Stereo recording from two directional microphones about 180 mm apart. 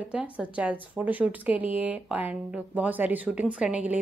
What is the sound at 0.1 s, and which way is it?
Speech, 5° right (ahead or behind).